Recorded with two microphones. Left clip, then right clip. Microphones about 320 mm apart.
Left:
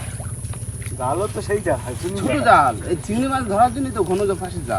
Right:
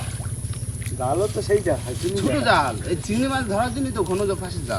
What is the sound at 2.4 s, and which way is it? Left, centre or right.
Speech, centre.